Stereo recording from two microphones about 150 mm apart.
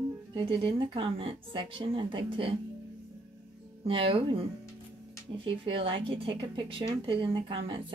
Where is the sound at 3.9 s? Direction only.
35° right (ahead or behind).